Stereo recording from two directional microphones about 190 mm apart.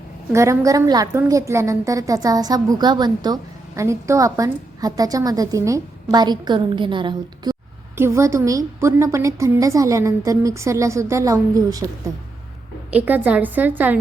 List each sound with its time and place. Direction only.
0.3 s a woman's voice: 15° right (ahead or behind)
7.9 s a woman's voice: 15° right (ahead or behind)
12.9 s a woman's voice: 10° right (ahead or behind)